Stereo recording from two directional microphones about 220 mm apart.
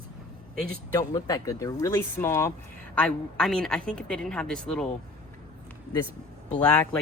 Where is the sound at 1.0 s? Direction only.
15° left (ahead or behind).